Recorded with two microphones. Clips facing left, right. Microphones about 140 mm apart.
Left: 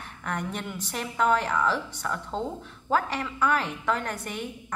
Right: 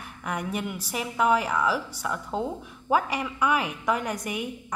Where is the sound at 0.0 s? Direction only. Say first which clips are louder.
Right 1 dB; 10° right (ahead or behind).